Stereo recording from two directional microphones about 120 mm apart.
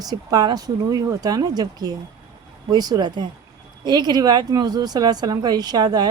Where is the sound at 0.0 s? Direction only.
30° right (ahead or behind).